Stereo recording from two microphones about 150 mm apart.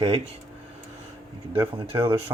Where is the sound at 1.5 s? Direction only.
20° right (ahead or behind).